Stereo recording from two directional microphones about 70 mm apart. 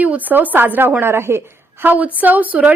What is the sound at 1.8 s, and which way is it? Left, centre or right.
Speech, right.